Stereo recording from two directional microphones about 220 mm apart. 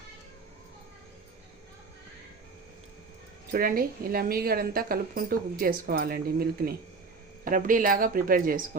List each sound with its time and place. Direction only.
3.5 s a woman's voice: 40° right (ahead or behind)